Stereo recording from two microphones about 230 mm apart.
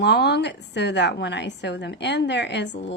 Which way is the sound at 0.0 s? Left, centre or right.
Left.